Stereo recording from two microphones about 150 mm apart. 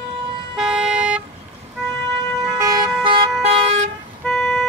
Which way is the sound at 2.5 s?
25° right (ahead or behind).